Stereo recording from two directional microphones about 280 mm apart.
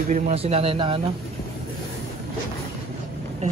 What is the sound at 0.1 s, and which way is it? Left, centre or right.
Speech, right.